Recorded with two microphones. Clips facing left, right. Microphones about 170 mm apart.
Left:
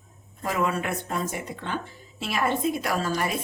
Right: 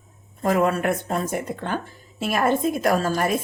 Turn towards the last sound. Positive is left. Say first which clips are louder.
# right 6 dB
turn(degrees=-45)  # may be behind; listen again after turning